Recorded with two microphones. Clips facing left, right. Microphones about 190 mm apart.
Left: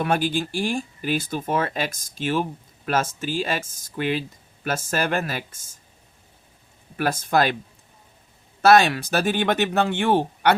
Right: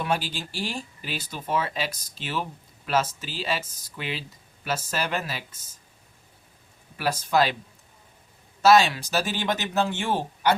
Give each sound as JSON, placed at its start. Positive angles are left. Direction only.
{"t": 0.0, "sound": "speech", "side_deg": 50}
{"t": 6.9, "sound": "speech", "side_deg": 50}
{"t": 8.6, "sound": "speech", "side_deg": 55}